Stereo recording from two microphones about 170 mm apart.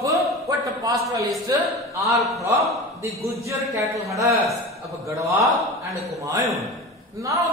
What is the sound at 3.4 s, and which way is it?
A man's voice, 20° right (ahead or behind).